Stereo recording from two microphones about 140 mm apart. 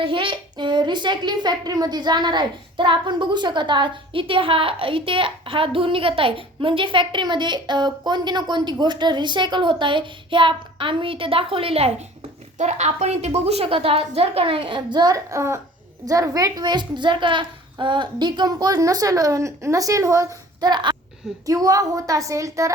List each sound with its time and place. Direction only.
0.0 s a child's voice: 40° right (ahead or behind); by 22.7 s 20° right (ahead or behind)